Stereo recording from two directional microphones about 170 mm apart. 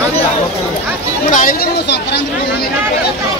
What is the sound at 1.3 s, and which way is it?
Speech, 50° left (ahead or behind).